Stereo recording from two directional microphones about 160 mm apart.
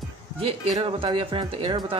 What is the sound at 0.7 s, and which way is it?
Speech, 35° right (ahead or behind).